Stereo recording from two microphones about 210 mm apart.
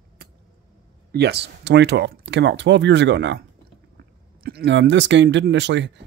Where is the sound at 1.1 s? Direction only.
50° right (ahead or behind).